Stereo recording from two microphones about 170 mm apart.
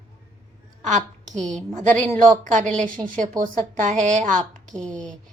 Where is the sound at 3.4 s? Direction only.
50° right (ahead or behind).